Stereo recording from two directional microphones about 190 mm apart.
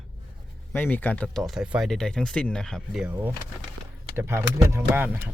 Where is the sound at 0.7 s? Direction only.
10° left (ahead or behind).